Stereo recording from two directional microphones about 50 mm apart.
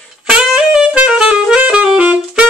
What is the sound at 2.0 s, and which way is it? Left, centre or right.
Saxophone, right.